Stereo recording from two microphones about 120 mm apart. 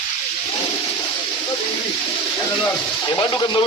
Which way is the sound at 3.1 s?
40° left (ahead or behind).